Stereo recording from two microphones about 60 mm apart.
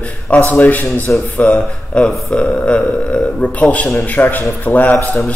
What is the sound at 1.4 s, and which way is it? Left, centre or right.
A man's voice, centre.